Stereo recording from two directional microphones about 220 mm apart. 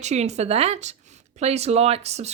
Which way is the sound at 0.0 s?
30° right (ahead or behind).